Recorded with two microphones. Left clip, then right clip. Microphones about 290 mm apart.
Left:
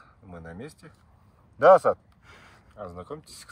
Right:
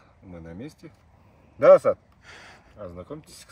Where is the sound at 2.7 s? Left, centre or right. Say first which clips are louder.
Even; centre.